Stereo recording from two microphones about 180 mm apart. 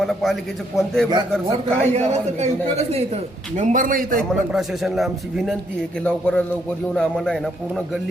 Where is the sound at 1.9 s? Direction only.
40° right (ahead or behind).